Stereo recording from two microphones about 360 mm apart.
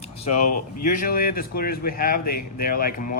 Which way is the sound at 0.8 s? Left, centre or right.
Left.